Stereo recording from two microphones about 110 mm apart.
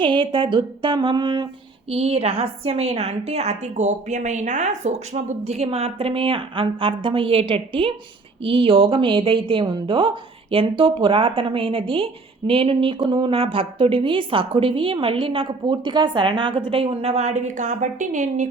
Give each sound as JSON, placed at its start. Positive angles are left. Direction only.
{"t": 0.0, "sound": "a woman's voice", "side_deg": -50}
{"t": 1.9, "sound": "a woman's voice", "side_deg": -65}